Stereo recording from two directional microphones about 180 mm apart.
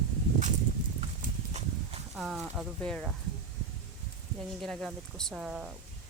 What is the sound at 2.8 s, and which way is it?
Speech, 5° left (ahead or behind).